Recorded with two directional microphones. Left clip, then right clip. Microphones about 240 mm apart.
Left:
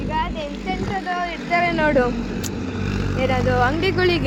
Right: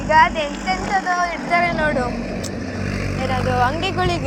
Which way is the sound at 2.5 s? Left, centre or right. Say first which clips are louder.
Right 1 dB; centre.